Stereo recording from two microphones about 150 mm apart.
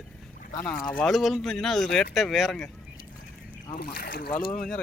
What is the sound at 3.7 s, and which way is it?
Speech, 80° left.